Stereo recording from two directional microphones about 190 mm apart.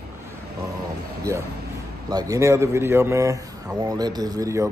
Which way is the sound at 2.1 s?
20° right (ahead or behind).